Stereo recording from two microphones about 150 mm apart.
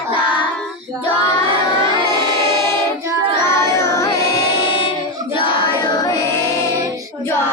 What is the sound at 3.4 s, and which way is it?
Music, 20° left (ahead or behind).